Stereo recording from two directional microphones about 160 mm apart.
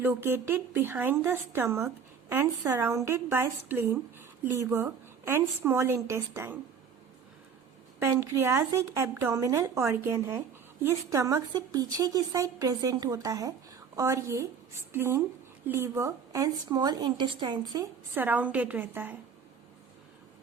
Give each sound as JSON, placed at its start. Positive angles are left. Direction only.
{"t": 0.0, "sound": "a woman's voice", "side_deg": -15}
{"t": 7.9, "sound": "a woman's voice", "side_deg": -15}
{"t": 18.1, "sound": "a woman's voice", "side_deg": -10}